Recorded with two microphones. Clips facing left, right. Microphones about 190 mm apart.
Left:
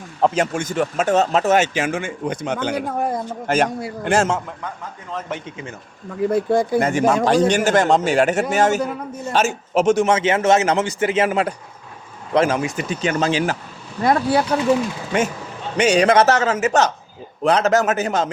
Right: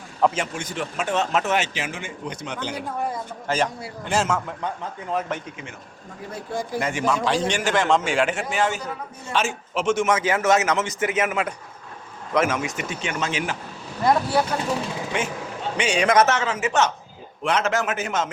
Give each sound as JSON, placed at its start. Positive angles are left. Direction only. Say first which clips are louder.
{"t": 0.3, "sound": "a man's voice", "louder": "left 8 dB", "side_deg": 45}
{"t": 6.3, "sound": "speech", "louder": "left 11 dB", "side_deg": 60}
{"t": 6.7, "sound": "a man's voice", "louder": "left 7 dB", "side_deg": 40}
{"t": 14.0, "sound": "speech", "louder": "left 3 dB", "side_deg": 70}
{"t": 15.1, "sound": "a man's voice", "louder": "left 8 dB", "side_deg": 45}